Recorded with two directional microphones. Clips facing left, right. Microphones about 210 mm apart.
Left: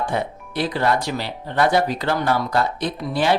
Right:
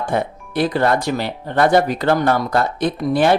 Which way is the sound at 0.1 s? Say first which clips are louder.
Right 4 dB; 50° right (ahead or behind).